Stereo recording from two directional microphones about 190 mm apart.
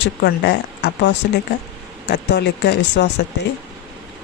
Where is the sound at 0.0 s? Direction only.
65° left (ahead or behind).